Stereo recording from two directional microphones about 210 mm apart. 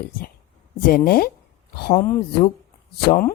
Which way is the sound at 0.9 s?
45° left (ahead or behind).